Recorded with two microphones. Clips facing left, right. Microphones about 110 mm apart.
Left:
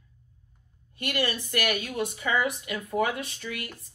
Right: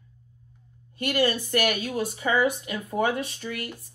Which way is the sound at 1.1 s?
30° right (ahead or behind).